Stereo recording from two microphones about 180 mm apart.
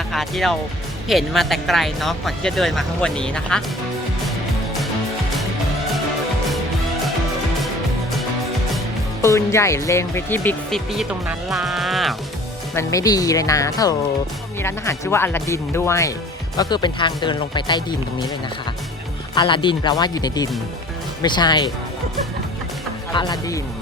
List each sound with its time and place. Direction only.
0.1 s speech: centre (ahead or behind)
9.2 s speech: 15° left (ahead or behind)
10.9 s speech: 5° right (ahead or behind)
12.7 s speech: 20° left (ahead or behind)
19.3 s speech: 25° left (ahead or behind)
23.1 s speech: 20° left (ahead or behind)